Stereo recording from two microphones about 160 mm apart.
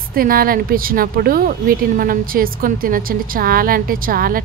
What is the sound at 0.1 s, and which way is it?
A woman's voice, 65° right (ahead or behind).